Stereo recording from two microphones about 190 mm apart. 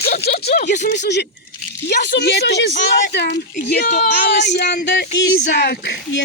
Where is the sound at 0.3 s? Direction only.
55° left (ahead or behind).